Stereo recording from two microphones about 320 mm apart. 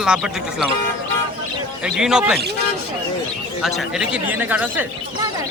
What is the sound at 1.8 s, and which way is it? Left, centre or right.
Speech, centre.